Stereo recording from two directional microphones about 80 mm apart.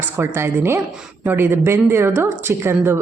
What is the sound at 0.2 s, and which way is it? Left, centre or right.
A woman's voice, right.